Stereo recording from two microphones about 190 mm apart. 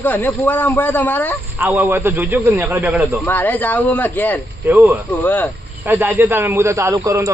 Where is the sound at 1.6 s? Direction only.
10° right (ahead or behind).